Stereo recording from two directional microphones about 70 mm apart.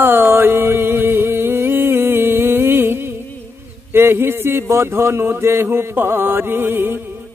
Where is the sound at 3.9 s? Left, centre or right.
Right.